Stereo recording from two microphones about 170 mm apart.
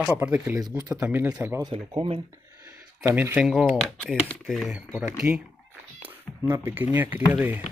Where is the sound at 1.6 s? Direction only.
30° right (ahead or behind).